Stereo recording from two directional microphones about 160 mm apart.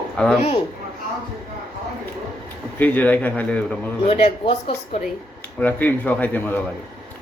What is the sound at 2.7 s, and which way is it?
Speech, 10° left (ahead or behind).